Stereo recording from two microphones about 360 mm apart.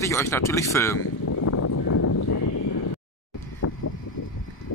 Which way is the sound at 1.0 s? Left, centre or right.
Left.